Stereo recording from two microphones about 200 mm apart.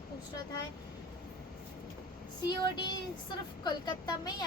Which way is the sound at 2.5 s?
20° left (ahead or behind).